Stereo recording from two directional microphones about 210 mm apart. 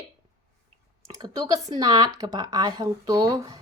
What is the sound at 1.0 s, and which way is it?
Speech, 15° right (ahead or behind).